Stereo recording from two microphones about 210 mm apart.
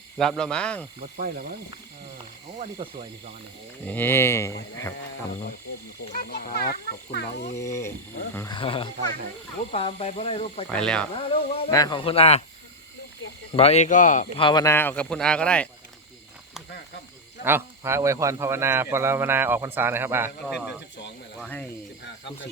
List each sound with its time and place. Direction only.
0.2 s speech: centre (ahead or behind)
0.9 s speech: 40° right (ahead or behind)
3.8 s speech: 10° left (ahead or behind)
6.1 s a child's voice: 45° left (ahead or behind)
7.5 s speech: 15° left (ahead or behind)
10.7 s speech: 5° left (ahead or behind)
11.1 s speech: 25° left (ahead or behind)
13.5 s speech: 30° left (ahead or behind)
14.3 s speech: 20° left (ahead or behind); by 15.7 s 5° left (ahead or behind)
17.4 s speech: 10° right (ahead or behind); by 21.7 s 10° left (ahead or behind)